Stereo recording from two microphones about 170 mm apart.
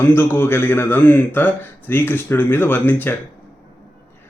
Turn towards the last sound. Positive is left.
turn(degrees=10)  # may be behind; listen again after turning